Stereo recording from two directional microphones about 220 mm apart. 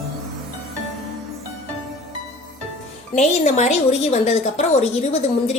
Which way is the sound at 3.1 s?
30° left (ahead or behind).